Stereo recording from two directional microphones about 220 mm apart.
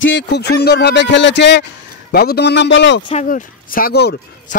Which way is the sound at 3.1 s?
35° left (ahead or behind).